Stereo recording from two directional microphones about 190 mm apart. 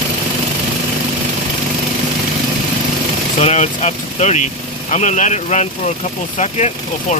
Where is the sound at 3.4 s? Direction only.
35° left (ahead or behind).